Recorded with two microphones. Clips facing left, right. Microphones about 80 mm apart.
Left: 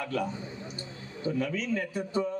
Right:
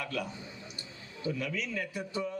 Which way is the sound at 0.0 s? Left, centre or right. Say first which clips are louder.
Left 5 dB; left.